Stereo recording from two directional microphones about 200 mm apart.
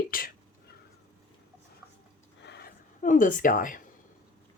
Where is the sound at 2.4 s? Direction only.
55° left (ahead or behind).